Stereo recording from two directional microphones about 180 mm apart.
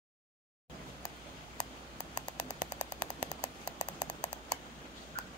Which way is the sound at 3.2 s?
25° left (ahead or behind).